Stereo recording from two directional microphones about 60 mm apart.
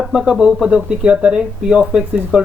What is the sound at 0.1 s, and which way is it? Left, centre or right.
Speech, centre.